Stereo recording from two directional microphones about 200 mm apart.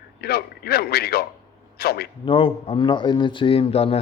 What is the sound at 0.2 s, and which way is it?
Speech, 50° left (ahead or behind).